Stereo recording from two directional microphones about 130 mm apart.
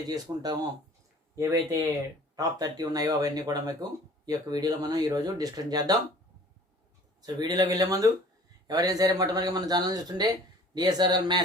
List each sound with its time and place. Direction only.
0.1 s a man's voice: 30° right (ahead or behind)
1.4 s speech: 20° right (ahead or behind)
2.3 s speech: 30° right (ahead or behind)
7.2 s a man's voice: 30° right (ahead or behind)